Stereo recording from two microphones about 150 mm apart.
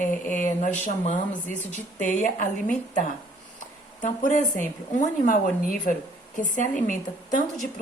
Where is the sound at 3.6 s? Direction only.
60° left (ahead or behind).